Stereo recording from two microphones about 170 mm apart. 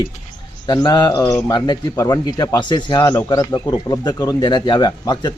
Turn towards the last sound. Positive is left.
turn(degrees=25)  # may be behind; listen again after turning